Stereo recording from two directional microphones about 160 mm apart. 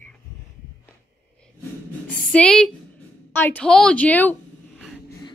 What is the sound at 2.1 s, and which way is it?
A woman's voice, 5° left (ahead or behind).